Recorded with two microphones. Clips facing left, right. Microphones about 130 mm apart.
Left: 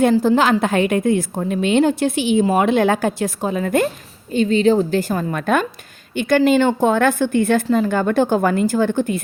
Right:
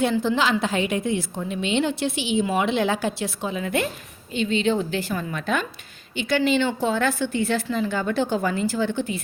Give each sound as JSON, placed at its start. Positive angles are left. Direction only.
{"t": 0.0, "sound": "a woman's voice", "side_deg": 45}